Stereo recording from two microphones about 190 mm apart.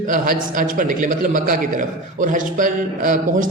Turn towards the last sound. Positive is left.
turn(degrees=-45)  # may be behind; listen again after turning